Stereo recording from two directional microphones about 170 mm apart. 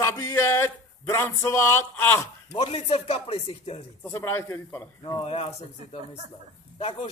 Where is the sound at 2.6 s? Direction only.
35° left (ahead or behind).